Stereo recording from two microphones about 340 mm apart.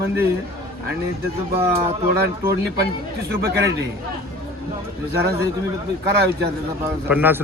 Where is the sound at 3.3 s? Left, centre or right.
Right.